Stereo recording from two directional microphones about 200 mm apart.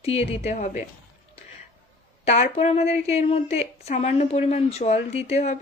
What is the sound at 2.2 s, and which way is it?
Speech, 35° left (ahead or behind).